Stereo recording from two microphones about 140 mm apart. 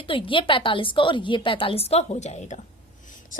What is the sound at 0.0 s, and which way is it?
A woman's voice, 35° left (ahead or behind).